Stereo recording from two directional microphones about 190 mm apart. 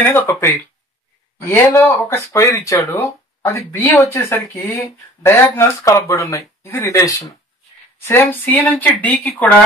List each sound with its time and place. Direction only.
0.0 s speech: 10° left (ahead or behind)
1.5 s speech: 15° left (ahead or behind)